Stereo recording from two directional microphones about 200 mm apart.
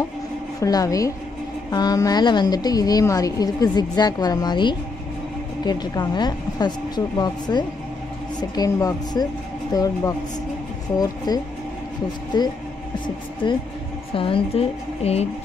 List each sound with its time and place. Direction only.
0.6 s a woman's voice: 15° left (ahead or behind)
11.3 s a woman's voice: 20° left (ahead or behind)